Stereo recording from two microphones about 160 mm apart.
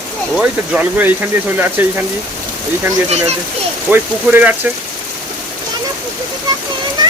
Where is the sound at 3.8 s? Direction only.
10° right (ahead or behind).